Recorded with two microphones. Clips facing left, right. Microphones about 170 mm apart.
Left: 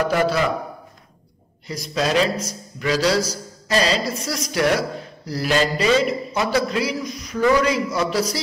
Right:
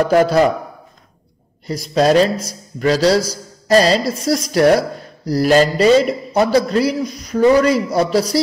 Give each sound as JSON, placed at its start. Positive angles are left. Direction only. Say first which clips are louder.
{"t": 0.1, "sound": "a man's voice", "louder": "right 7 dB", "side_deg": -45}
{"t": 1.7, "sound": "a man's voice", "louder": "right 8 dB", "side_deg": -40}